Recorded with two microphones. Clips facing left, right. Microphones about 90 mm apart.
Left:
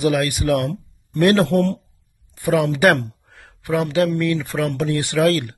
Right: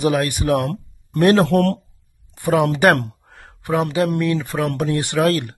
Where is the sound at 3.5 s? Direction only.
35° right (ahead or behind).